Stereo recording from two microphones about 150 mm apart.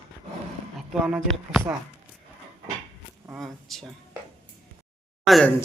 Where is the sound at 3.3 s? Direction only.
Centre (ahead or behind).